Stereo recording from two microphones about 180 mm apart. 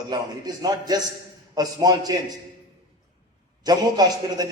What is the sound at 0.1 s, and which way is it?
A man's voice, 20° right (ahead or behind).